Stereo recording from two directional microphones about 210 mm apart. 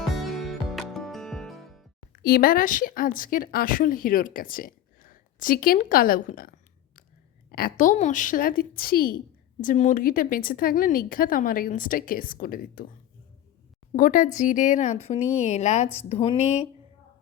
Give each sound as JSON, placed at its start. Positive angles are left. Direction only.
{"t": 0.2, "sound": "music", "side_deg": 0}
{"t": 2.1, "sound": "speech", "side_deg": 45}
{"t": 7.5, "sound": "a woman's voice", "side_deg": 40}
{"t": 13.9, "sound": "speech", "side_deg": 40}